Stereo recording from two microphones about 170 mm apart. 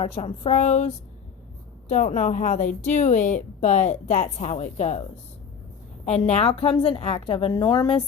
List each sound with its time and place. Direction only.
0.0 s a woman's voice: 35° left (ahead or behind)
6.1 s a woman's voice: 40° left (ahead or behind)